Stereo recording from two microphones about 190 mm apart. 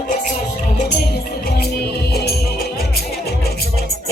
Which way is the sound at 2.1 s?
55° left (ahead or behind).